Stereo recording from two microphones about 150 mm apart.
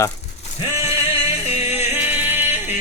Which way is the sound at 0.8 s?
45° left (ahead or behind).